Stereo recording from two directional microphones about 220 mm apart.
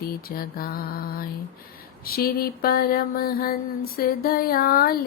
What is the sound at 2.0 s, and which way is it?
Mantra, 45° left (ahead or behind).